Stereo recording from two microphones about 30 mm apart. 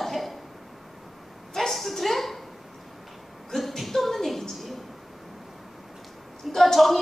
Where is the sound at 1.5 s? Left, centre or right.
Centre.